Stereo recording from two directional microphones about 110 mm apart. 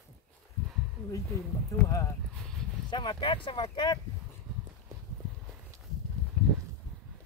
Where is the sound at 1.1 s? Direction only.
30° left (ahead or behind).